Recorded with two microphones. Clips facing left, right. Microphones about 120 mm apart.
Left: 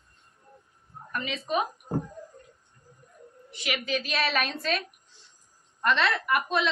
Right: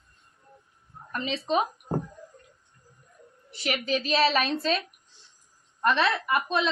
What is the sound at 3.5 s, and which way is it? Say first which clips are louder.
A woman's voice: right 3 dB; 35° right (ahead or behind).